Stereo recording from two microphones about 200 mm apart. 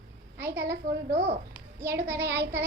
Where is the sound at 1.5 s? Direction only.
10° right (ahead or behind).